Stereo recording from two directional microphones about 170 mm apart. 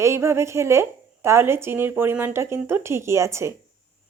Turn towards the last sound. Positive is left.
turn(degrees=-15)  # may be behind; listen again after turning